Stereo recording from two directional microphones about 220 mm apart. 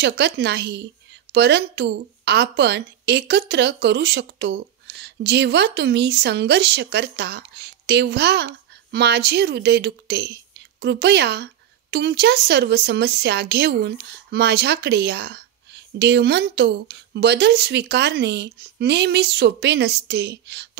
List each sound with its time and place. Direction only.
0.0 s a woman's voice: 50° right (ahead or behind)